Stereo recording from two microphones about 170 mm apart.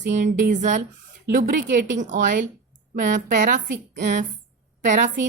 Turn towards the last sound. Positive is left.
turn(degrees=-50)  # may be behind; listen again after turning